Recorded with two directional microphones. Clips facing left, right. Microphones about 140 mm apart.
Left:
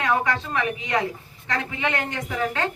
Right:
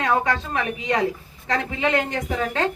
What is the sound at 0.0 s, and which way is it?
A woman's voice, 25° right (ahead or behind).